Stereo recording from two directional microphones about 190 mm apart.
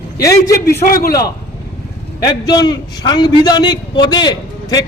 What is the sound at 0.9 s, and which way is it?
Speech, 50° left (ahead or behind).